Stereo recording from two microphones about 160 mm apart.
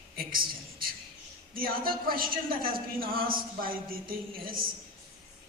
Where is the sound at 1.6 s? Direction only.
65° right (ahead or behind).